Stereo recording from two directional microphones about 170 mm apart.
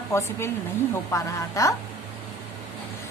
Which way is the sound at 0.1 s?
15° left (ahead or behind).